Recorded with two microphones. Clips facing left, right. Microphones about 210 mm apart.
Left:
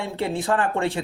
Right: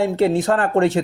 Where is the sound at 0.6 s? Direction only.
40° right (ahead or behind).